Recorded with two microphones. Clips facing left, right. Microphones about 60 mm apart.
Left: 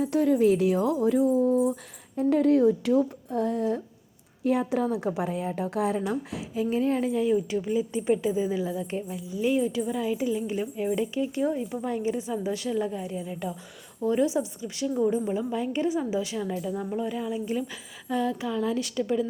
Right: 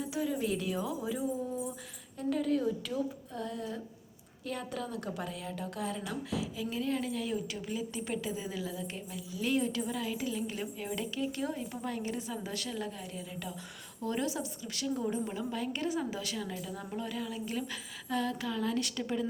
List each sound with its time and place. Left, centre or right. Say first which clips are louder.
0.0 s speech: left 12 dB; left
4.4 s a woman's voice: left 13 dB; left
5.2 s a woman's voice: left 10 dB; left
9.4 s speech: left 6 dB; centre